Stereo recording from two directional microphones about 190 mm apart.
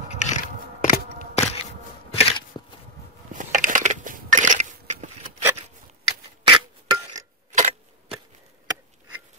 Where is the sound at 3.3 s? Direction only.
40° right (ahead or behind).